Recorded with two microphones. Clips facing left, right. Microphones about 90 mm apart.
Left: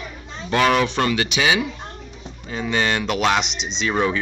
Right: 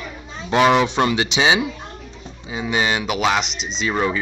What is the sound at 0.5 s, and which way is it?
Speech, 20° right (ahead or behind).